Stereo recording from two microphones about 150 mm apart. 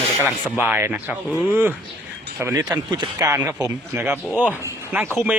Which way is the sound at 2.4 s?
15° right (ahead or behind).